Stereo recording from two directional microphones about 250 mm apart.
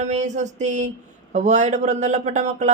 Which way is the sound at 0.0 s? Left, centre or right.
Right.